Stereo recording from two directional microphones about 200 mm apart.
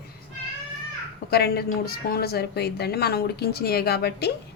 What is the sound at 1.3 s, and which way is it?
A woman's voice, 55° left (ahead or behind).